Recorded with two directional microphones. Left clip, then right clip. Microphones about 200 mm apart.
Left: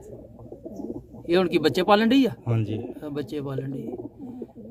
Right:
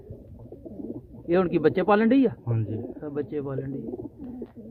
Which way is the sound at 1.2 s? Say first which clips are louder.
Left 1 dB; 10° left (ahead or behind).